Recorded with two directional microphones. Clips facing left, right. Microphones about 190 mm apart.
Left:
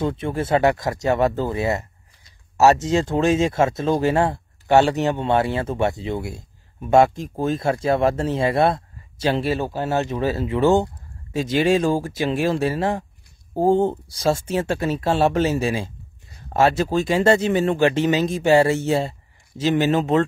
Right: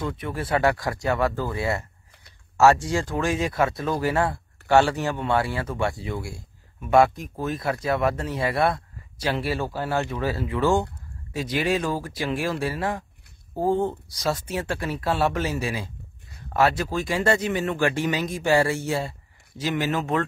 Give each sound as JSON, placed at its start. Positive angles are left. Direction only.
{"t": 0.0, "sound": "speech", "side_deg": 25}